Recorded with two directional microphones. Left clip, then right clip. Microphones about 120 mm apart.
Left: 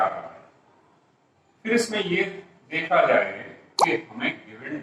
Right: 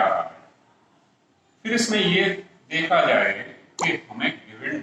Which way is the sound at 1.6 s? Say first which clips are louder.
Right 2 dB; 40° right (ahead or behind).